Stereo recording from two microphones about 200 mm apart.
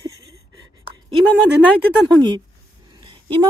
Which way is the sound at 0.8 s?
25° right (ahead or behind).